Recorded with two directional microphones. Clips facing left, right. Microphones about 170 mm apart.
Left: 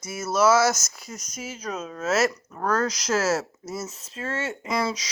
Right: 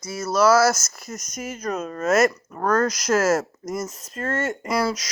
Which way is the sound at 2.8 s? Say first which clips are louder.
Right 4 dB; 10° right (ahead or behind).